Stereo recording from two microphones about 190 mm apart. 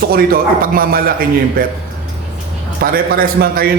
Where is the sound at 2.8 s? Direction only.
50° right (ahead or behind).